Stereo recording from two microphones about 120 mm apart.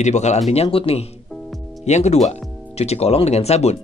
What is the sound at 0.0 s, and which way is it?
Speech, 70° left (ahead or behind).